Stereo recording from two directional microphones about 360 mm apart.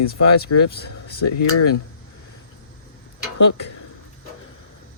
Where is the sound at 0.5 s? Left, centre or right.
Left.